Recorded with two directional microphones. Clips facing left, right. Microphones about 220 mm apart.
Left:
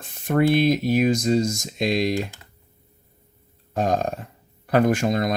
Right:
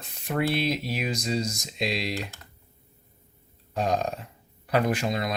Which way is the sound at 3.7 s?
50° left (ahead or behind).